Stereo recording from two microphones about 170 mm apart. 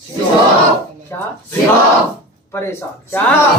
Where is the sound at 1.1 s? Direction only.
15° left (ahead or behind).